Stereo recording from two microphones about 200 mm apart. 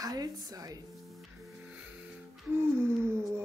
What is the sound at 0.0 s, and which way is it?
Speech, 20° right (ahead or behind).